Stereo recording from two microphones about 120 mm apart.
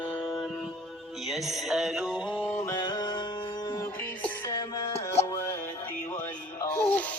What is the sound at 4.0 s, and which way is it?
Music, 15° left (ahead or behind).